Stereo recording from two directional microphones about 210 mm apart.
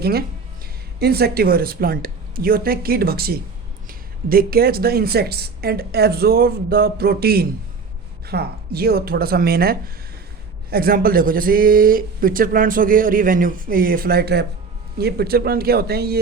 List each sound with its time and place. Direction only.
0.0 s speech: 45° right (ahead or behind)